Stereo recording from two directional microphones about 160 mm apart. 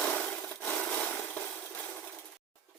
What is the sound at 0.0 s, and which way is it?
Wood, 5° left (ahead or behind).